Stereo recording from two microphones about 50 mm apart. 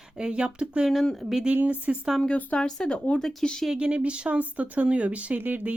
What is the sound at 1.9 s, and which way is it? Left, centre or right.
Speech, centre.